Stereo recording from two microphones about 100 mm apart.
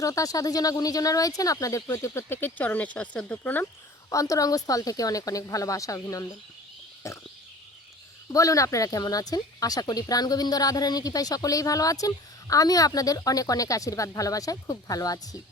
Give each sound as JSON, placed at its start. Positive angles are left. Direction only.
{"t": 0.0, "sound": "speech", "side_deg": 35}
{"t": 4.1, "sound": "speech", "side_deg": 35}
{"t": 7.1, "sound": "a sound", "side_deg": 30}
{"t": 8.3, "sound": "speech", "side_deg": 35}